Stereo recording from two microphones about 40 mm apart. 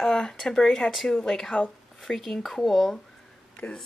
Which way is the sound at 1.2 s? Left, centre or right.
Centre.